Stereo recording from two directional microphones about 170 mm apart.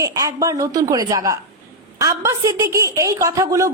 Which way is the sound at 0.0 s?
20° right (ahead or behind).